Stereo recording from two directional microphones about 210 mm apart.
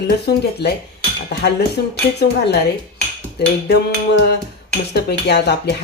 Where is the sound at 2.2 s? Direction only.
50° left (ahead or behind).